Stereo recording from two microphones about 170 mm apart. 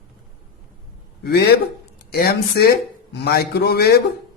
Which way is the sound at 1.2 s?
70° left (ahead or behind).